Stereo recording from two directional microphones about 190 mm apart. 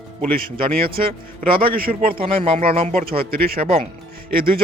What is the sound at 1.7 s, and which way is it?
Speech, 50° right (ahead or behind).